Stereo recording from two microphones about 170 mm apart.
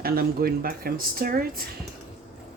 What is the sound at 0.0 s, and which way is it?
Speech, 60° right (ahead or behind).